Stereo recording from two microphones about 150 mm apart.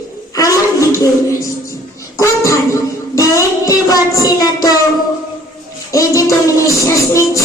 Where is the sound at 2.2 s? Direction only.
20° left (ahead or behind).